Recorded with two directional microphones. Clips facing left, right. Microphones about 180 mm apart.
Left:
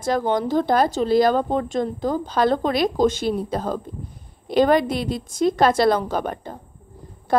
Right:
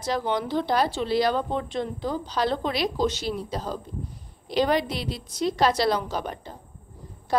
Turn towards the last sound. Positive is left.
turn(degrees=55)  # may be behind; listen again after turning